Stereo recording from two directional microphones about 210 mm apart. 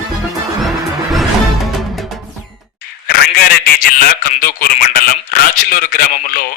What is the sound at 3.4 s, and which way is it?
A man's voice, 40° left (ahead or behind).